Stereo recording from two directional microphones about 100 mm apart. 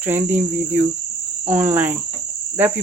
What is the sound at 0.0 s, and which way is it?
Speech, 20° right (ahead or behind).